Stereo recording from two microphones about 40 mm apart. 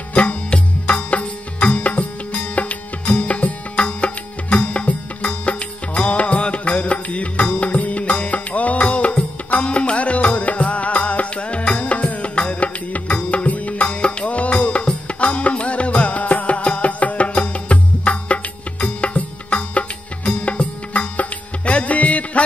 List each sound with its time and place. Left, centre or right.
0.1 s music: left